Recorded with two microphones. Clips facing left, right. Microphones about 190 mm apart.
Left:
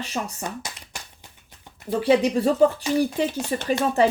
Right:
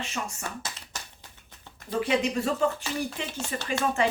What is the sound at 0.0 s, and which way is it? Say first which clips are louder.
Speech: left 5 dB; 35° left (ahead or behind).